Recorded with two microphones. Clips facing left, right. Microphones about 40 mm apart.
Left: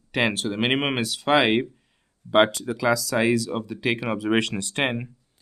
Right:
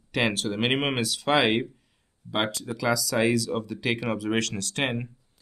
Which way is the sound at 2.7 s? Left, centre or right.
Centre.